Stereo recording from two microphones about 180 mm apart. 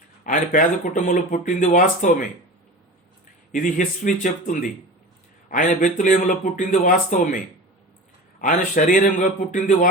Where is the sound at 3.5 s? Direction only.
45° left (ahead or behind).